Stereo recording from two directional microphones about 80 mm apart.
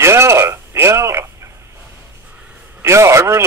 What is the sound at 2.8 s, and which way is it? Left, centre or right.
Speech, right.